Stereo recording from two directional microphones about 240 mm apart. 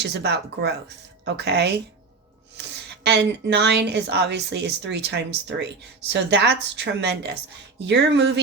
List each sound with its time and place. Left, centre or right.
0.0 s a woman's voice: right